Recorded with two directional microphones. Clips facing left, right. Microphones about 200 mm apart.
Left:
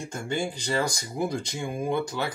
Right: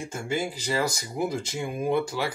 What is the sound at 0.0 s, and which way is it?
Speech, 5° right (ahead or behind).